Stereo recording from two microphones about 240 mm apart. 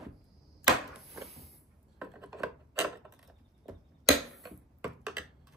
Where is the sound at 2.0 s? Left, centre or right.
Centre.